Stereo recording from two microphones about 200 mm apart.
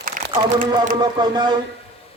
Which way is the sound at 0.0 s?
45° right (ahead or behind).